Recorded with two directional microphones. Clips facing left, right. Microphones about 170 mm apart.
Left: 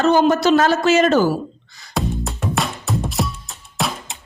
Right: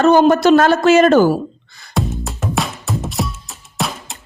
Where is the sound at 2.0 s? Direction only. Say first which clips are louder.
Right 1 dB; centre (ahead or behind).